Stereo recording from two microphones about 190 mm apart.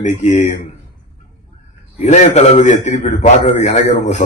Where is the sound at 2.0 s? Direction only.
40° left (ahead or behind).